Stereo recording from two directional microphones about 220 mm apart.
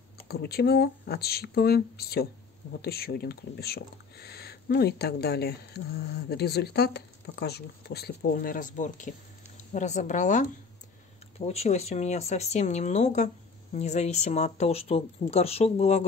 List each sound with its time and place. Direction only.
0.3 s a woman's voice: 45° left (ahead or behind)